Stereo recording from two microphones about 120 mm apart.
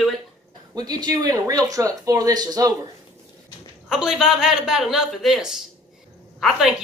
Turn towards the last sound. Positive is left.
turn(degrees=0)  # may be behind; listen again after turning